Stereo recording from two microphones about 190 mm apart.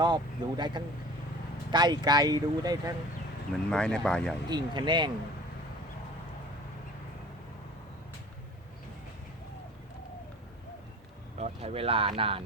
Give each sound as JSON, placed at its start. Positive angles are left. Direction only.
{"t": 0.0, "sound": "speech", "side_deg": -25}
{"t": 3.7, "sound": "speech", "side_deg": 5}
{"t": 4.4, "sound": "speech", "side_deg": -20}
{"t": 11.3, "sound": "speech", "side_deg": -35}